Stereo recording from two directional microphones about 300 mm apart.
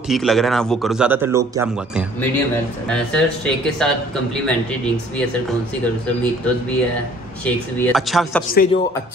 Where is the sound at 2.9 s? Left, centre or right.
Centre.